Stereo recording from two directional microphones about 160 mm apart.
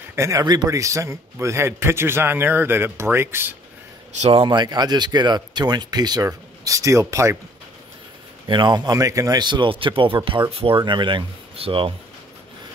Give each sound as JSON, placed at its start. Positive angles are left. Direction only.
{"t": 0.1, "sound": "a man's voice", "side_deg": -20}
{"t": 4.3, "sound": "speech", "side_deg": -30}
{"t": 8.5, "sound": "speech", "side_deg": -30}